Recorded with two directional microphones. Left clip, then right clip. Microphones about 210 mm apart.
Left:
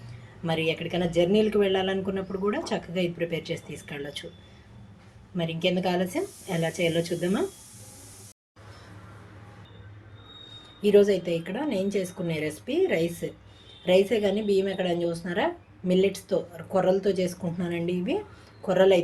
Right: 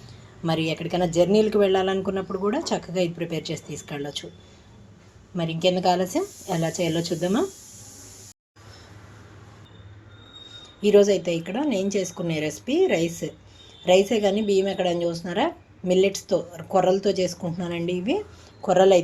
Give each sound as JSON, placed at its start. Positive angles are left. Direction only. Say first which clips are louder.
{"t": 0.4, "sound": "a man's voice", "louder": "right 1 dB", "side_deg": -25}
{"t": 5.4, "sound": "a man's voice", "louder": "right 4 dB", "side_deg": -25}
{"t": 10.8, "sound": "a man's voice", "louder": "right 3 dB", "side_deg": -20}